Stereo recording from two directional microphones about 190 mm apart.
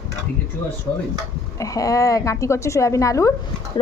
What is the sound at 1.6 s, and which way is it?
A woman's voice, 20° left (ahead or behind).